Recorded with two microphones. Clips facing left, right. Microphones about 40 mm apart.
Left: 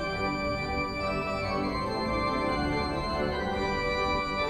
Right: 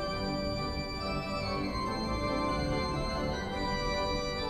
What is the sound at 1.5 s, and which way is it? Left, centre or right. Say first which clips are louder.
Organ: left 4 dB; left.